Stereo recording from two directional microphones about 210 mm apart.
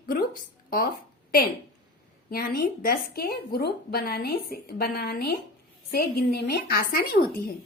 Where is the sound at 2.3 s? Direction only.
45° left (ahead or behind).